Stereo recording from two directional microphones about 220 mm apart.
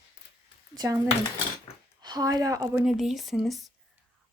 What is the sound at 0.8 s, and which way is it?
A woman's voice, 15° right (ahead or behind).